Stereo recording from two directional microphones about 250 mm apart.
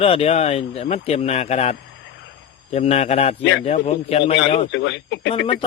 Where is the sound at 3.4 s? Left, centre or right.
Left.